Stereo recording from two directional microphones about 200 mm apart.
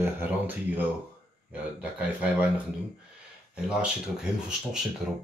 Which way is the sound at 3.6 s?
5° right (ahead or behind).